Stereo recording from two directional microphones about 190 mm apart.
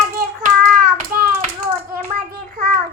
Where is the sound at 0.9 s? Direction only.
50° right (ahead or behind).